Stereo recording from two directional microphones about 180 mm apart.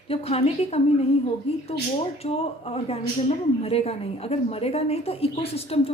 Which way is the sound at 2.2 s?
35° left (ahead or behind).